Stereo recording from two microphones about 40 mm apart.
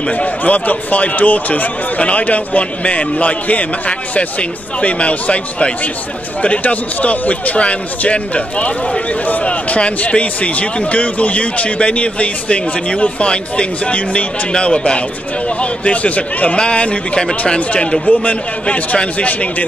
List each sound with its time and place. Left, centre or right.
0.0 s a man's voice: left